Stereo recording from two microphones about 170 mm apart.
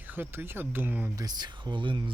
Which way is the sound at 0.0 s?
10° right (ahead or behind).